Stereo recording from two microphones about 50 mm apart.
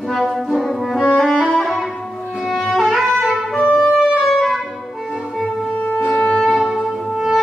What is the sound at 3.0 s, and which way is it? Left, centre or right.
Music, centre.